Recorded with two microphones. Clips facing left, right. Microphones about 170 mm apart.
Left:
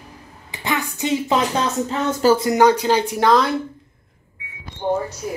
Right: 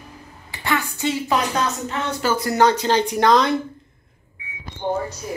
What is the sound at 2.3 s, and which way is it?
Speech, 15° left (ahead or behind).